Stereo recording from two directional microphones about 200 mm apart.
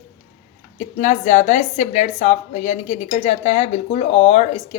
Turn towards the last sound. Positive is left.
turn(degrees=30)  # may be behind; listen again after turning